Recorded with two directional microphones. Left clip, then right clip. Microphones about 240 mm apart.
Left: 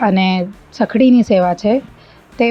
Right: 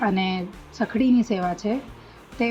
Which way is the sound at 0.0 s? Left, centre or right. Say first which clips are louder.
Left 9 dB; left.